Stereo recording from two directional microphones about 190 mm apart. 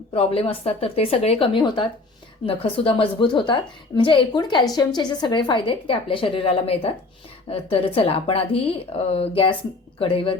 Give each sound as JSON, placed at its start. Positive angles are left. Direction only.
{"t": 0.1, "sound": "a woman's voice", "side_deg": 30}